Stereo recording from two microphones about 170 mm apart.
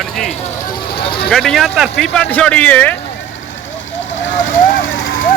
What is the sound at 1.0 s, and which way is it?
Speech, 30° left (ahead or behind).